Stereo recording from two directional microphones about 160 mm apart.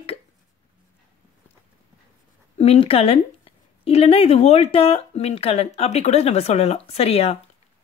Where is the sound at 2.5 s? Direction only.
40° left (ahead or behind).